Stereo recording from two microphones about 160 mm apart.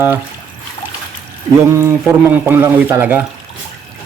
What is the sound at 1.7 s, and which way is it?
Speech, 15° right (ahead or behind).